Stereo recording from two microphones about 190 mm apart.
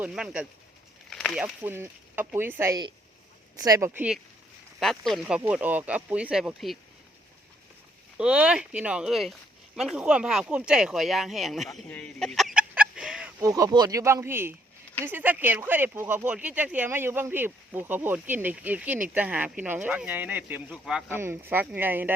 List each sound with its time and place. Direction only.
0.0 s speech: 5° right (ahead or behind)
8.2 s speech: 5° right (ahead or behind)
13.4 s speech: 20° right (ahead or behind)